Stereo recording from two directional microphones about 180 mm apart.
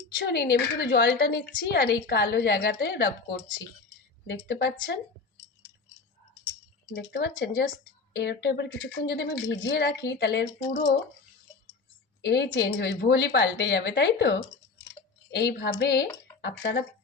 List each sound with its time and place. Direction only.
0.3 s speech: 65° left (ahead or behind)
6.9 s speech: 65° left (ahead or behind)
12.2 s speech: 70° left (ahead or behind)